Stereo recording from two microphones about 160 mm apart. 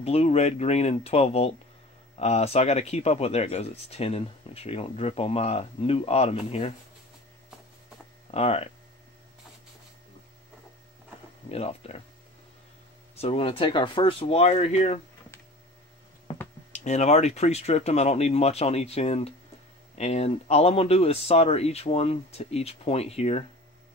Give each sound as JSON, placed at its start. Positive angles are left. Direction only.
{"t": 0.0, "sound": "speech", "side_deg": 40}
{"t": 8.3, "sound": "speech", "side_deg": 40}
{"t": 11.4, "sound": "speech", "side_deg": 40}
{"t": 13.1, "sound": "speech", "side_deg": 40}
{"t": 16.3, "sound": "a sound", "side_deg": 35}
{"t": 16.7, "sound": "speech", "side_deg": 45}